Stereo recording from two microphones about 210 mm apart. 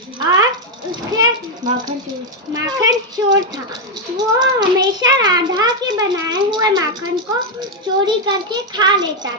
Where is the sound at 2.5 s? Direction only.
15° right (ahead or behind).